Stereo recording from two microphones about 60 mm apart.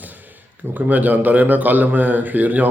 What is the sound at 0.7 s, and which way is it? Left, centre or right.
A man's voice, right.